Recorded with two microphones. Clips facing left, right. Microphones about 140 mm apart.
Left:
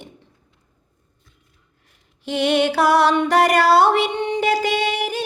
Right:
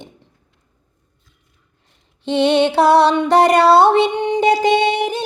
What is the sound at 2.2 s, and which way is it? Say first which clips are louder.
Music: right 4 dB; 25° right (ahead or behind).